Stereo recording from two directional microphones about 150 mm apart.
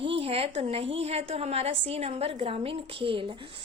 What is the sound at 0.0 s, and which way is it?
A woman's voice, 40° right (ahead or behind).